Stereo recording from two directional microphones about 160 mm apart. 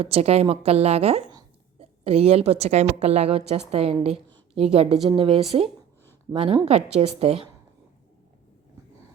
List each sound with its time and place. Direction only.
0.0 s a woman's voice: 40° right (ahead or behind)
4.3 s a sound: 35° right (ahead or behind)
5.0 s a woman's voice: 35° right (ahead or behind)